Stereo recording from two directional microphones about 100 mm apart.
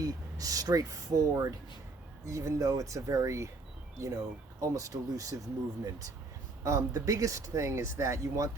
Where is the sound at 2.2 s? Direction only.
30° right (ahead or behind).